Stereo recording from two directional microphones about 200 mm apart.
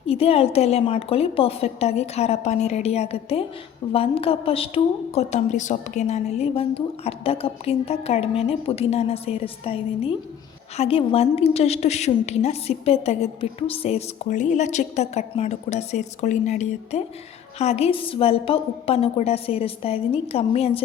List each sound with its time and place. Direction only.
0.0 s a woman's voice: 30° left (ahead or behind)